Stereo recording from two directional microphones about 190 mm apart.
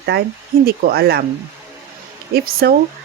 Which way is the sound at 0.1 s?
55° right (ahead or behind).